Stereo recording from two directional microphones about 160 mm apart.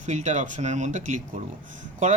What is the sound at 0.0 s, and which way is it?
A man's voice, 50° right (ahead or behind).